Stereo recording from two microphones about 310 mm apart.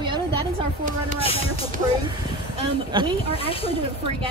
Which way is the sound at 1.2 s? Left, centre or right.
Centre.